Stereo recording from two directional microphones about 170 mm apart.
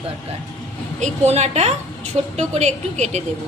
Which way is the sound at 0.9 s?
40° right (ahead or behind).